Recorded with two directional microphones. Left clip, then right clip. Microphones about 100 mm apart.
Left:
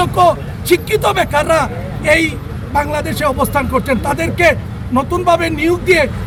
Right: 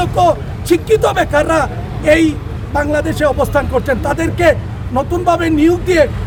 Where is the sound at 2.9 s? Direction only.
45° right (ahead or behind).